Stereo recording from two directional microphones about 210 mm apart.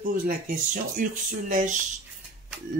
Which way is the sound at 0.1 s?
40° right (ahead or behind).